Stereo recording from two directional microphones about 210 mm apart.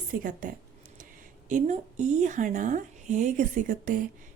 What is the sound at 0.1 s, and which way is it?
Speech, 40° right (ahead or behind).